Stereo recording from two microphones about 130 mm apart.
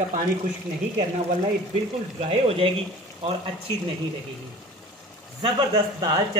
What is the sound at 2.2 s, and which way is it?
Speech, 50° right (ahead or behind).